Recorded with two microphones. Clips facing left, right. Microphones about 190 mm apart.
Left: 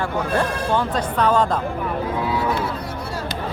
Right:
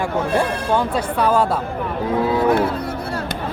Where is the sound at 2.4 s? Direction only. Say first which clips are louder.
Right 6 dB; 55° right (ahead or behind).